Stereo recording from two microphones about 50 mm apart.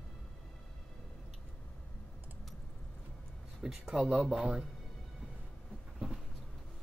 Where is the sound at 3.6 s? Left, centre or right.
Centre.